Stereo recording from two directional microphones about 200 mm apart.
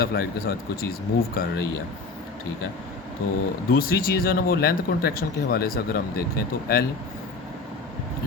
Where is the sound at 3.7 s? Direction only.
45° left (ahead or behind).